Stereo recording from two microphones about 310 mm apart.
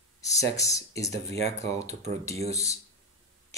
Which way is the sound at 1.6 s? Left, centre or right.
Right.